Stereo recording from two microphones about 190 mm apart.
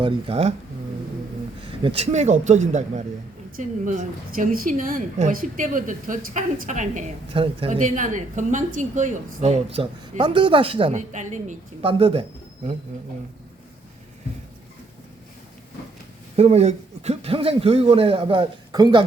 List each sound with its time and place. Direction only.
0.0 s speech: 30° right (ahead or behind)
1.8 s a woman's voice: 30° right (ahead or behind)
10.9 s a woman's voice: 40° right (ahead or behind)
16.3 s a woman's voice: 30° right (ahead or behind)